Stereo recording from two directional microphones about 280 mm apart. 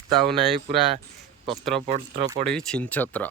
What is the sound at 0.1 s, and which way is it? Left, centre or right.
Speech, centre.